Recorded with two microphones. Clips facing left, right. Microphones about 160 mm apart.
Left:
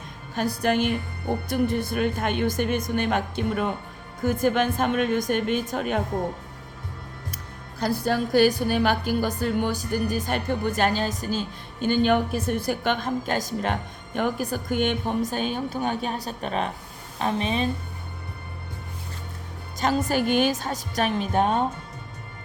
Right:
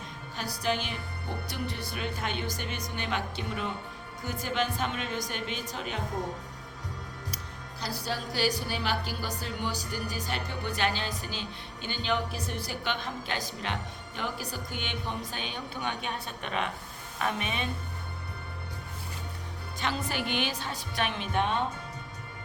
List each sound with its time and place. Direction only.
0.3 s a woman's voice: 55° left (ahead or behind)
7.8 s a woman's voice: 50° left (ahead or behind); by 17.7 s 30° left (ahead or behind)
19.8 s a woman's voice: 45° left (ahead or behind)